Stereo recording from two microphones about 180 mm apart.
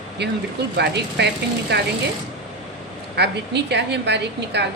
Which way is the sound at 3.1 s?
70° right (ahead or behind).